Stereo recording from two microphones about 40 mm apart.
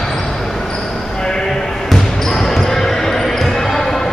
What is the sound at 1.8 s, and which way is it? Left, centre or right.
Basketball bounce, centre.